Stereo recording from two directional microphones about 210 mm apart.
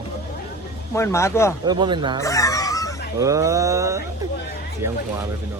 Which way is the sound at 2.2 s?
15° left (ahead or behind).